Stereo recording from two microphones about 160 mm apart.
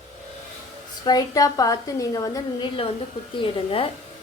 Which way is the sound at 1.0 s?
25° left (ahead or behind).